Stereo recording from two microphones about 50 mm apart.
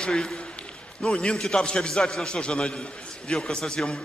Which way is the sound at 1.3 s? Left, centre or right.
Centre.